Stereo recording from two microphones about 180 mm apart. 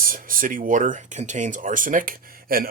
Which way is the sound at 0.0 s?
50° right (ahead or behind).